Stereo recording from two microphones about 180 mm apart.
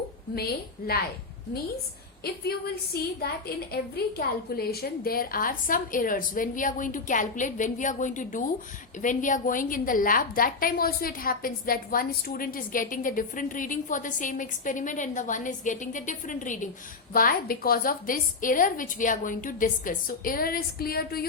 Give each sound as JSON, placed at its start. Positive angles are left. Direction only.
{"t": 2.2, "sound": "a woman's voice", "side_deg": 60}